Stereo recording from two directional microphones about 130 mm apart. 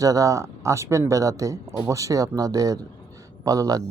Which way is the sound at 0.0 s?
25° right (ahead or behind).